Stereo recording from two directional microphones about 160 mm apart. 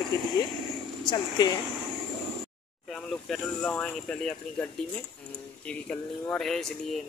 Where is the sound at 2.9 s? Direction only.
Centre (ahead or behind).